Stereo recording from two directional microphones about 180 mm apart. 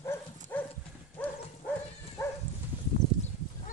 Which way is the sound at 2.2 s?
15° left (ahead or behind).